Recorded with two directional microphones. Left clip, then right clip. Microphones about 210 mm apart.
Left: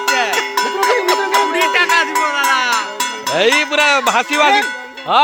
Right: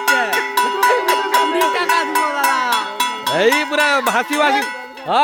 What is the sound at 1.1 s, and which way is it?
Music, 15° right (ahead or behind).